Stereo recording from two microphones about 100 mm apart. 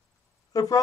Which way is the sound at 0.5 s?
35° left (ahead or behind).